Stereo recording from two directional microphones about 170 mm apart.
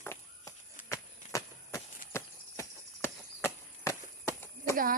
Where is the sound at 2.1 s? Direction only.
15° left (ahead or behind).